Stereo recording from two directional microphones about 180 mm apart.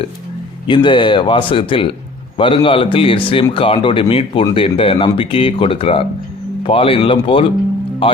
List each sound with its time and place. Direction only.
0.7 s speech: 25° left (ahead or behind)